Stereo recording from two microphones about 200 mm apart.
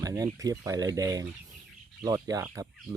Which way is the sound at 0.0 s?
15° right (ahead or behind).